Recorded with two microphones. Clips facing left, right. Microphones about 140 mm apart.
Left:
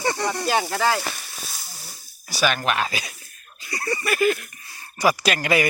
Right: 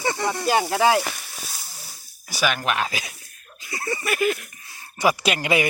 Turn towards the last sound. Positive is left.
turn(degrees=-15)  # may be behind; listen again after turning